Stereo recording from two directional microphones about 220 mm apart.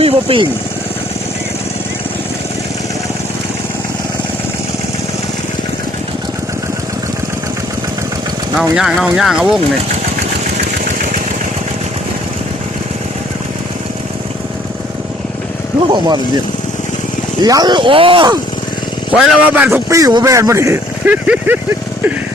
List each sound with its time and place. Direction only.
0.0 s speech: 25° right (ahead or behind)
8.7 s speech: 5° right (ahead or behind)
15.9 s speech: 20° right (ahead or behind)
17.4 s speech: 15° right (ahead or behind)
19.1 s a man's voice: 5° right (ahead or behind)